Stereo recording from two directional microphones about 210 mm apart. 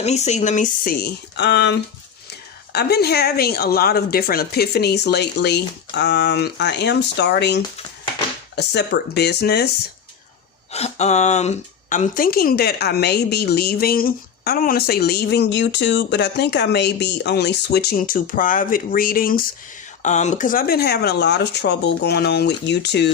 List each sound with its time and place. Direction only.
0.0 s a woman's voice: 35° left (ahead or behind); by 9.7 s 50° left (ahead or behind)
10.7 s a woman's voice: 30° left (ahead or behind); by 23.1 s 55° left (ahead or behind)